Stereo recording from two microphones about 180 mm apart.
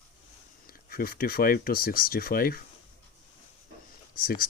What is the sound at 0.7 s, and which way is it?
Speech, 55° left (ahead or behind).